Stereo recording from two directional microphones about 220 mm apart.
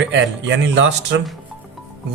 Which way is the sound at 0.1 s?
55° right (ahead or behind).